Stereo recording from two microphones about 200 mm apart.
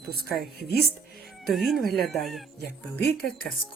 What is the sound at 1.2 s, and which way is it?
Speech, centre (ahead or behind).